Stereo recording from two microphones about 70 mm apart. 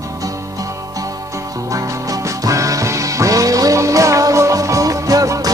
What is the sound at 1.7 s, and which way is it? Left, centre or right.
Music, right.